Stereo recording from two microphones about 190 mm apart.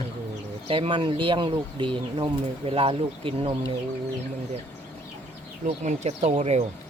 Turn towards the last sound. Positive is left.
turn(degrees=-35)  # may be behind; listen again after turning